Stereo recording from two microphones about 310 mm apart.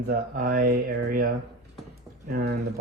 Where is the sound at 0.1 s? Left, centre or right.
Right.